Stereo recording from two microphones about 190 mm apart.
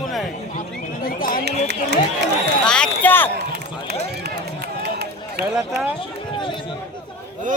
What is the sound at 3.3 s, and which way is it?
Run, 60° right (ahead or behind).